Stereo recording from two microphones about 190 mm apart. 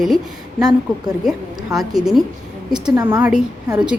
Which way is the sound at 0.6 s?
20° right (ahead or behind).